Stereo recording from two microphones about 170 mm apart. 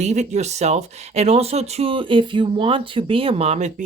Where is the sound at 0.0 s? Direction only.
40° right (ahead or behind).